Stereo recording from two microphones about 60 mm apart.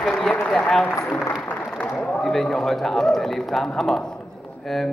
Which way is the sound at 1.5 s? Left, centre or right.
Left.